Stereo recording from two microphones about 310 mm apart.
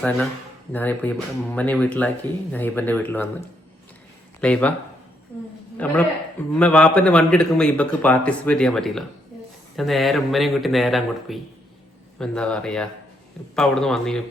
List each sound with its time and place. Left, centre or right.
0.7 s a man's voice: centre
4.4 s speech: centre
5.7 s a man's voice: centre